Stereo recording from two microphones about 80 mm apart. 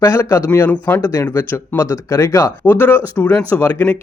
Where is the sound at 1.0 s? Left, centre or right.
Left.